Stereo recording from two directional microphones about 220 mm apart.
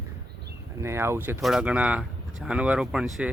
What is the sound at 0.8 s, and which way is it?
Speech, 10° right (ahead or behind).